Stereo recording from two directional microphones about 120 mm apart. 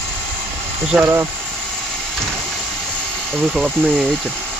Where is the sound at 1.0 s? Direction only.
20° right (ahead or behind).